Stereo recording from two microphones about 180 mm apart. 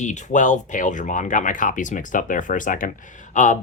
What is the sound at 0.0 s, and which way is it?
Speech, 40° left (ahead or behind).